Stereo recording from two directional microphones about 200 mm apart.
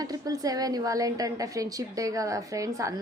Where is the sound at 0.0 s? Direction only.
20° right (ahead or behind).